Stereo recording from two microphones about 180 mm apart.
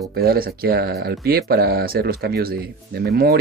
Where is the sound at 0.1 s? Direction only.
60° right (ahead or behind).